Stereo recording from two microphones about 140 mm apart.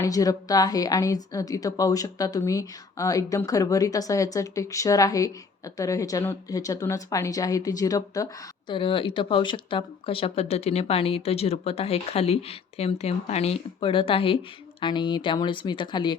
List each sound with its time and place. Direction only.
0.0 s a woman's voice: 25° left (ahead or behind)